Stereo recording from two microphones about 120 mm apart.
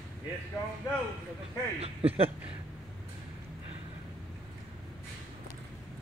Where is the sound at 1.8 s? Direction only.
55° right (ahead or behind).